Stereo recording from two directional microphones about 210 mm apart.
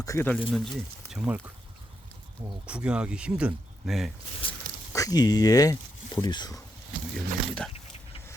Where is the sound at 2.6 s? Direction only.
5° right (ahead or behind).